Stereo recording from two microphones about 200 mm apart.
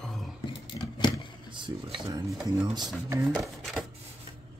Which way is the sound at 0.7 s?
20° left (ahead or behind).